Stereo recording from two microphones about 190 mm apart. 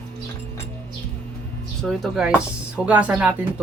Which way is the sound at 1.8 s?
Centre (ahead or behind).